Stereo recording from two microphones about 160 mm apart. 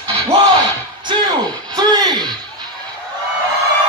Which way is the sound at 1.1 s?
30° right (ahead or behind).